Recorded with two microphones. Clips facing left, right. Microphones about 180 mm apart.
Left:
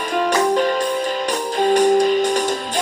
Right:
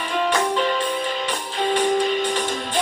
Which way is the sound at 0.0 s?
45° left (ahead or behind).